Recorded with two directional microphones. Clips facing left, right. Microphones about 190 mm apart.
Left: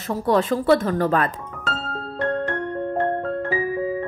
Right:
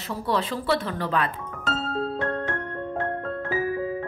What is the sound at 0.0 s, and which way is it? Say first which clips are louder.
Speech: left 6 dB; 45° left (ahead or behind).